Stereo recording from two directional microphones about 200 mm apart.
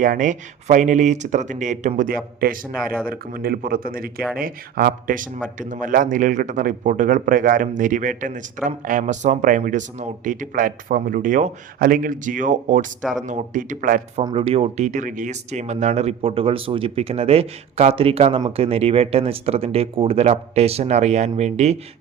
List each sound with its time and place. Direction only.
0.0 s speech: 40° right (ahead or behind)
14.3 s speech: 30° right (ahead or behind)